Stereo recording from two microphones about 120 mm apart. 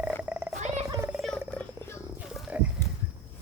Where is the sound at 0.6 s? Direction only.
65° right (ahead or behind).